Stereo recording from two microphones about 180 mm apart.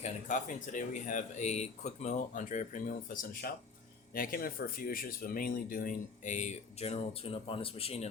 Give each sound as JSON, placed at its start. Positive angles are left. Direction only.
{"t": 0.0, "sound": "speech", "side_deg": 45}